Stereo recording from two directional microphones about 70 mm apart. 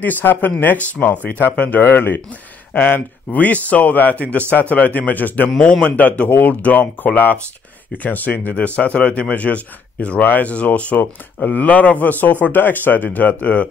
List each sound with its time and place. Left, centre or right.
0.0 s speech: left